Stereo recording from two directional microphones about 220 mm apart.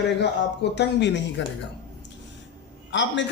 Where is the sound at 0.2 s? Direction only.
50° left (ahead or behind).